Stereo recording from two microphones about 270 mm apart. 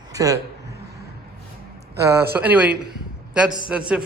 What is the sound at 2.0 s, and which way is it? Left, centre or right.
Speech, centre.